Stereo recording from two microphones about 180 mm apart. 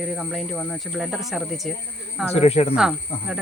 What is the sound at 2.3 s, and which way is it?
Speech, 35° left (ahead or behind).